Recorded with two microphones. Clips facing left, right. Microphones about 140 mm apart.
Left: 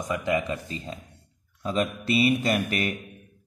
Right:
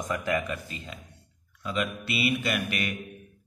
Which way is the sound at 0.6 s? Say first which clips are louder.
Left 5 dB; 35° left (ahead or behind).